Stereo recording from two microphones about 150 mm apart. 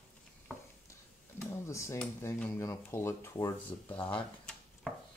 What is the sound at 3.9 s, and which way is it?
Speech, 35° left (ahead or behind).